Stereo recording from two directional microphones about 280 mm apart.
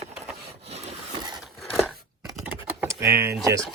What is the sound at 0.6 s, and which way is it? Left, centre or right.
Rub, right.